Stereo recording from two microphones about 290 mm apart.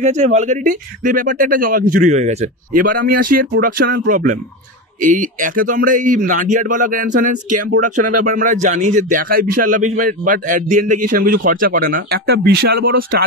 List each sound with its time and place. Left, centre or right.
0.0 s speech: right
7.9 s speech: right
8.3 s speech: right